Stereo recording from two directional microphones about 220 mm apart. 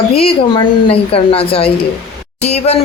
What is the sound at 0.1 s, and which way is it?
Speech, 25° left (ahead or behind).